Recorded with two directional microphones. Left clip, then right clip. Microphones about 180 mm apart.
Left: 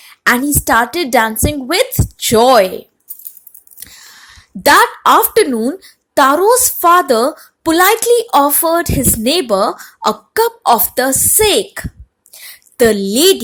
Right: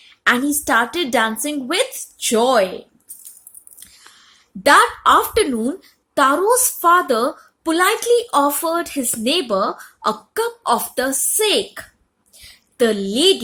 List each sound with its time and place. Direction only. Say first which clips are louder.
0.1 s a woman's voice: left 4 dB; 30° left (ahead or behind)
4.3 s speech: left 3 dB; 35° left (ahead or behind)
12.4 s a sound: left 6 dB; 35° left (ahead or behind)